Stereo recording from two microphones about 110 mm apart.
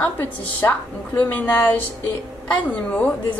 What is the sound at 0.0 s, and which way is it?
A woman's voice, 15° left (ahead or behind).